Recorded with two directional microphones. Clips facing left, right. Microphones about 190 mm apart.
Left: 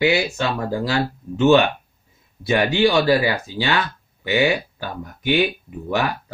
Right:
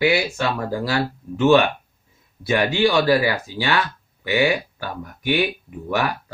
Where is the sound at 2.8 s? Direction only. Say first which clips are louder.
Left 1 dB; 20° left (ahead or behind).